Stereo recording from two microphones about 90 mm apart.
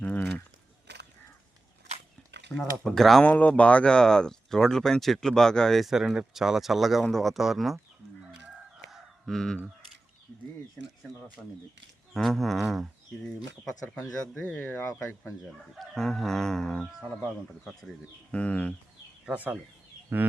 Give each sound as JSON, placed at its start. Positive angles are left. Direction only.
{"t": 2.6, "sound": "speech", "side_deg": 5}
{"t": 3.2, "sound": "speech", "side_deg": 15}
{"t": 8.9, "sound": "fowl", "side_deg": 0}
{"t": 12.1, "sound": "speech", "side_deg": 5}
{"t": 14.4, "sound": "speech", "side_deg": 20}
{"t": 15.4, "sound": "speech", "side_deg": 5}
{"t": 18.3, "sound": "speech", "side_deg": 15}
{"t": 19.2, "sound": "speech", "side_deg": -15}